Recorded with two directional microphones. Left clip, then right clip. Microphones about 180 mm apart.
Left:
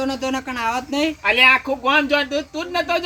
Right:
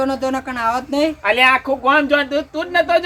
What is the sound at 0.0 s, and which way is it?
Speech, 15° right (ahead or behind).